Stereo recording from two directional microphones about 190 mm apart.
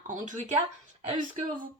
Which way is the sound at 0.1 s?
40° right (ahead or behind).